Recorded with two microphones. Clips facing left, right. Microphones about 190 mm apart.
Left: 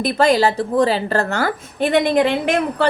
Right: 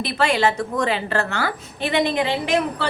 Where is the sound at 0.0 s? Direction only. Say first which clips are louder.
Left 5 dB; 45° left (ahead or behind).